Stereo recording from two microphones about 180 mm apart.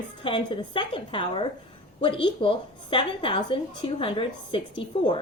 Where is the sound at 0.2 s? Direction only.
25° left (ahead or behind).